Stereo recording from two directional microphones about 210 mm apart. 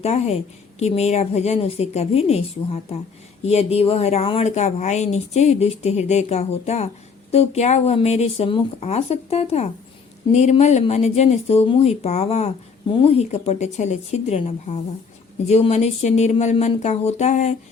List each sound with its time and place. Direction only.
0.0 s speech: 30° left (ahead or behind)
3.4 s speech: 30° left (ahead or behind)